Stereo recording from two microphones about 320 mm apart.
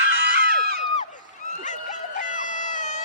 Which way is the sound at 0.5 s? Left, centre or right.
Right.